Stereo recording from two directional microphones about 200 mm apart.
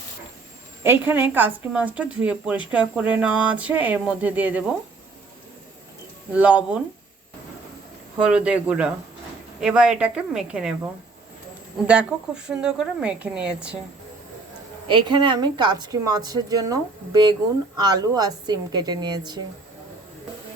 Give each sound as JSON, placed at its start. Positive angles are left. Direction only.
{"t": 0.8, "sound": "a woman's voice", "side_deg": -10}
{"t": 6.3, "sound": "a woman's voice", "side_deg": -5}
{"t": 8.2, "sound": "a woman's voice", "side_deg": -5}
{"t": 11.9, "sound": "a woman's voice", "side_deg": -5}
{"t": 14.8, "sound": "a woman's voice", "side_deg": -25}